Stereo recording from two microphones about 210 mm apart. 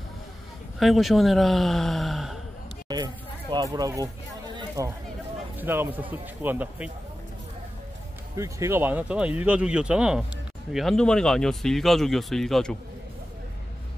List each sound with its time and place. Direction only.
0.7 s speech: centre (ahead or behind)
2.9 s a sound: 20° right (ahead or behind)
3.7 s speech: 15° right (ahead or behind)
4.6 s a sound: 15° right (ahead or behind)
5.6 s speech: 10° right (ahead or behind)
8.4 s speech: 15° right (ahead or behind)